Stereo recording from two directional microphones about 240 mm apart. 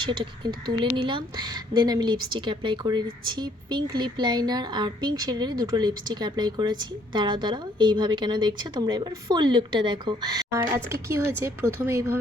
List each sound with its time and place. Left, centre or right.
0.0 s speech: centre